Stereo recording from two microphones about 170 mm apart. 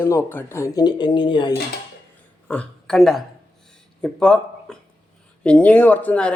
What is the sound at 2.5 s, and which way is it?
Speech, 5° left (ahead or behind).